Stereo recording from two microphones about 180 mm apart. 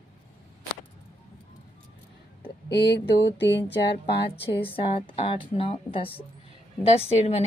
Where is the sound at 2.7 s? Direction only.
70° left (ahead or behind).